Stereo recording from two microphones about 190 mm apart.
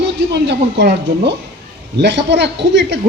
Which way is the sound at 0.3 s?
60° right (ahead or behind).